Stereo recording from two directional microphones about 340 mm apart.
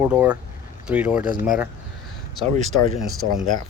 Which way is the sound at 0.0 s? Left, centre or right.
Centre.